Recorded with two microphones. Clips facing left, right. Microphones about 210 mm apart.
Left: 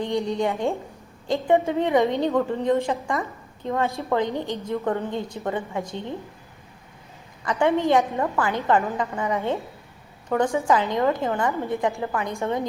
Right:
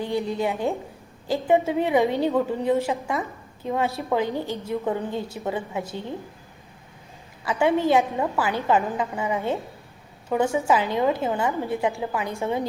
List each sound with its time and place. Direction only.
0.3 s a woman's voice: 5° right (ahead or behind)
7.6 s a woman's voice: 10° right (ahead or behind)